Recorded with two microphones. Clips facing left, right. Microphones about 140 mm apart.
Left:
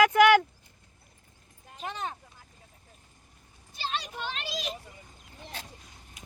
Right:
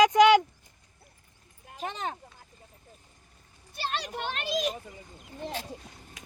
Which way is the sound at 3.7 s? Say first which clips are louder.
Right 2 dB; 60° right (ahead or behind).